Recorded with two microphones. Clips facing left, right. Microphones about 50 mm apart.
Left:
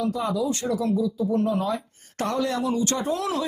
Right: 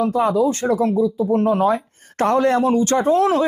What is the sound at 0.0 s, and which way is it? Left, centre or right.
Speech, right.